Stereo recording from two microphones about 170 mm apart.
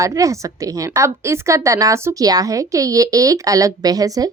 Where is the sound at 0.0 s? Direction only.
20° right (ahead or behind).